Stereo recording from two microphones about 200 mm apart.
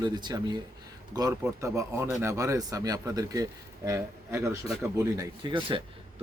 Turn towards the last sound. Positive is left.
turn(degrees=-25)  # may be behind; listen again after turning